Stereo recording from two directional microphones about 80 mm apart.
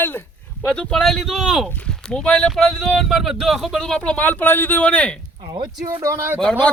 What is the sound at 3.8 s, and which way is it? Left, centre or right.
Speech, centre.